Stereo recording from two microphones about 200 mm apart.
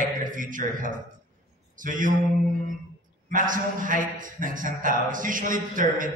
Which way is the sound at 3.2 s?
40° right (ahead or behind).